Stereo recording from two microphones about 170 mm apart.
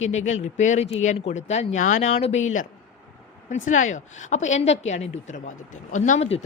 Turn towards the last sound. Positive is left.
turn(degrees=40)  # may be behind; listen again after turning